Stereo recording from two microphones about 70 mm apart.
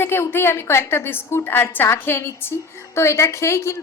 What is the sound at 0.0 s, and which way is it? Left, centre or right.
A woman's voice, left.